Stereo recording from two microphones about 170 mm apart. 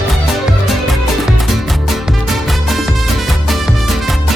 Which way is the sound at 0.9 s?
Centre (ahead or behind).